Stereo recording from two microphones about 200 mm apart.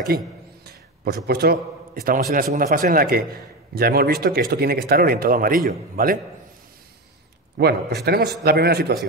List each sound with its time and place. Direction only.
1.2 s speech: 50° right (ahead or behind)
7.5 s speech: 55° right (ahead or behind)